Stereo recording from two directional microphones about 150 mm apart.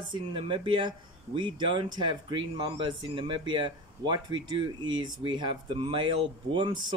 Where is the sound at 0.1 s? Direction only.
35° right (ahead or behind).